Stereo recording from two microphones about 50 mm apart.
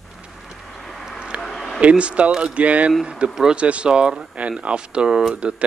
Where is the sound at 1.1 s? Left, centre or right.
Centre.